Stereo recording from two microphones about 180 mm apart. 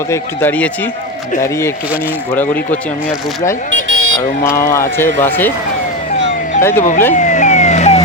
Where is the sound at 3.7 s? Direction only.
90° right.